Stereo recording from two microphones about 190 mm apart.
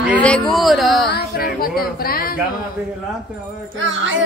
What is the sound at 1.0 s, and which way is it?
Speech, 55° left (ahead or behind).